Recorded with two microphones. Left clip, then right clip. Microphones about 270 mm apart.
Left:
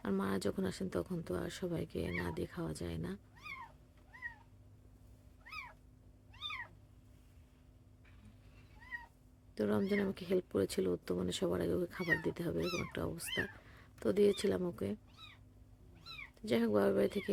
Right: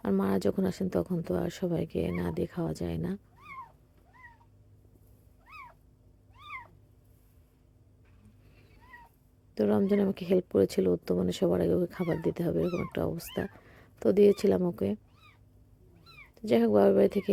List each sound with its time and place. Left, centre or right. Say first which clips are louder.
0.0 s speech: right 8 dB; centre
9.6 s speech: right 8 dB; centre
16.3 s speech: right 9 dB; centre